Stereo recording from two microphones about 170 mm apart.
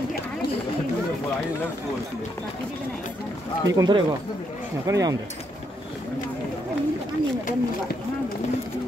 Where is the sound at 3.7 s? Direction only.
25° right (ahead or behind).